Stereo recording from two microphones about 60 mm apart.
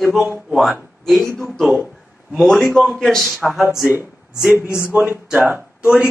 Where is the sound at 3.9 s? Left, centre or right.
Right.